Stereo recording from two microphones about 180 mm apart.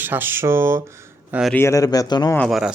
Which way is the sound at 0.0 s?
10° right (ahead or behind).